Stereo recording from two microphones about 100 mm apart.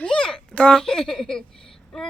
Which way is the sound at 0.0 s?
10° left (ahead or behind).